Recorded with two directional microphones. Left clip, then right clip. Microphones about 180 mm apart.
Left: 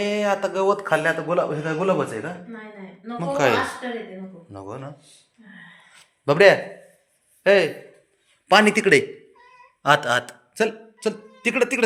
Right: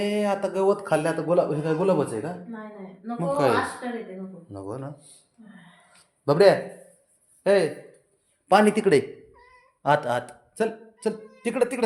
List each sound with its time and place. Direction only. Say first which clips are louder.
0.0 s speech: left 3 dB; 15° right (ahead or behind)
1.4 s a man's voice: even; centre (ahead or behind)
3.2 s a man's voice: left 2 dB; 15° right (ahead or behind)
6.2 s speech: left 3 dB; 10° left (ahead or behind)
7.4 s a man's voice: left 4 dB; 10° right (ahead or behind)